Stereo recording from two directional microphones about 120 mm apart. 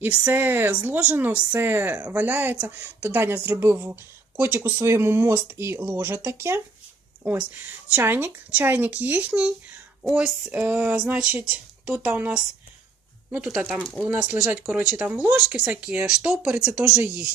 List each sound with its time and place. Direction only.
0.3 s speech: 15° right (ahead or behind)
7.9 s speech: 15° right (ahead or behind)
16.9 s speech: 20° right (ahead or behind)